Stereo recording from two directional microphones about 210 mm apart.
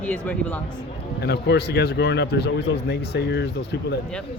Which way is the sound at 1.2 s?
50° left (ahead or behind).